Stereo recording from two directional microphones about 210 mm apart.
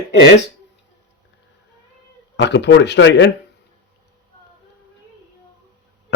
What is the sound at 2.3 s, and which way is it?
Speech, 55° left (ahead or behind).